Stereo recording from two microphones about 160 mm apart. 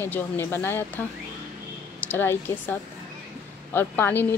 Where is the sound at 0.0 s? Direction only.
15° left (ahead or behind).